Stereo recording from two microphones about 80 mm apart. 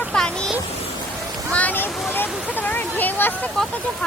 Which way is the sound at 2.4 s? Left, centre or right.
Left.